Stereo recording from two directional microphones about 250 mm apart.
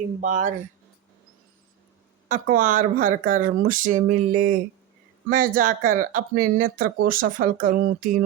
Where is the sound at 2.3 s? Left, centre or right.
Right.